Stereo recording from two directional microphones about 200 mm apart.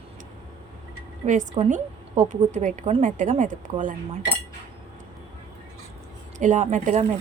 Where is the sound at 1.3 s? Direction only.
35° right (ahead or behind).